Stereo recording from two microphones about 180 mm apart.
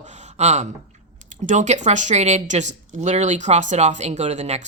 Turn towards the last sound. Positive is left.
turn(degrees=-40)  # may be behind; listen again after turning